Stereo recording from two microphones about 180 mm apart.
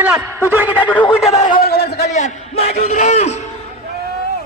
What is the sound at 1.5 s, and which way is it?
Speech, 60° left (ahead or behind).